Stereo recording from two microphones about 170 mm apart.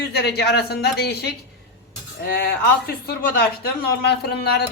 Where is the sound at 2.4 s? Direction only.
65° left (ahead or behind).